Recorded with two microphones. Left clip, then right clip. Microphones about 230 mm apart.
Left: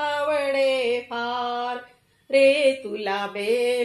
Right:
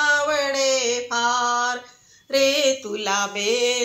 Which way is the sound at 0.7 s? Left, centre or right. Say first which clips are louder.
Right 2 dB; centre.